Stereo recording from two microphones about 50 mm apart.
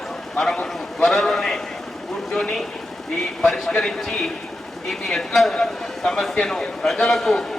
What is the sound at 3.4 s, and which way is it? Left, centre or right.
A man's voice, centre.